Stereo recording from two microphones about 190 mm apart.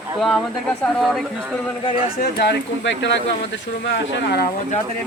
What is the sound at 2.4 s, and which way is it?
Speech, 65° left (ahead or behind).